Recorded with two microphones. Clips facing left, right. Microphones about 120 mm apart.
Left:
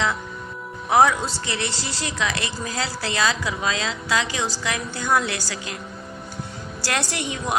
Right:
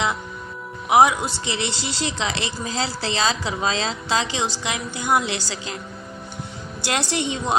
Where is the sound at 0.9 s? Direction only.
15° right (ahead or behind).